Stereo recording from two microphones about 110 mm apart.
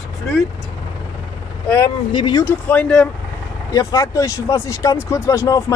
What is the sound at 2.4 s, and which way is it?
Speech, 15° left (ahead or behind).